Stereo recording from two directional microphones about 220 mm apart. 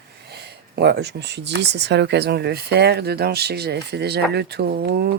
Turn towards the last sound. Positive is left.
turn(degrees=-45)  # may be behind; listen again after turning